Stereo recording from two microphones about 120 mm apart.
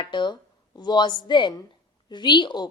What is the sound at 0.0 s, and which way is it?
Speech, 40° left (ahead or behind).